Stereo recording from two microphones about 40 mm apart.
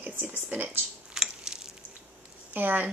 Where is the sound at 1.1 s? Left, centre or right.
Centre.